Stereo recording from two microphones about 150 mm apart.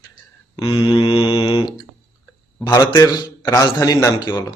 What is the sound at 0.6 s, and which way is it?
Mantra, 35° left (ahead or behind).